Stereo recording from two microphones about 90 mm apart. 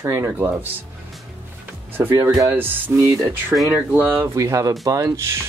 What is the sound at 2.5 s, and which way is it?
Speech, 25° right (ahead or behind).